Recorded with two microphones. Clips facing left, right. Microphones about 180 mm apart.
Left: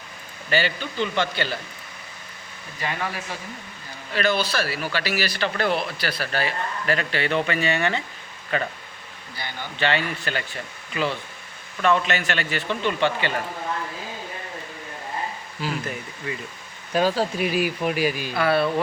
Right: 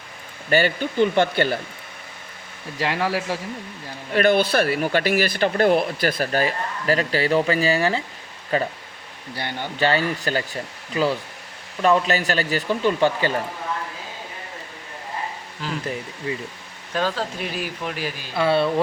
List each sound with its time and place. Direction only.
0.5 s speech: 50° right (ahead or behind)
2.7 s speech: 80° right
4.1 s speech: 55° right (ahead or behind); by 8.7 s 35° right (ahead or behind)
9.7 s speech: 40° right (ahead or behind)
16.9 s speech: 10° left (ahead or behind)
18.3 s speech: 25° right (ahead or behind)